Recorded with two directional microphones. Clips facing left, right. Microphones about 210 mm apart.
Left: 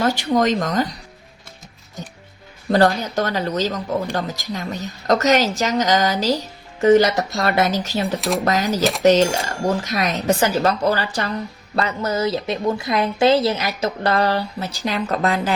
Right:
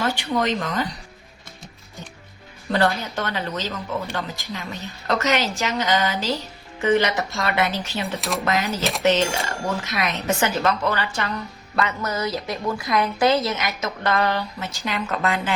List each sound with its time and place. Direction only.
0.0 s speech: 40° left (ahead or behind)
2.6 s speech: 40° left (ahead or behind)
8.8 s speech: centre (ahead or behind)
9.6 s speech: 40° left (ahead or behind)